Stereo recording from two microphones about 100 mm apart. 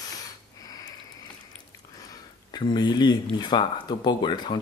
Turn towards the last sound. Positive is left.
turn(degrees=50)  # may be behind; listen again after turning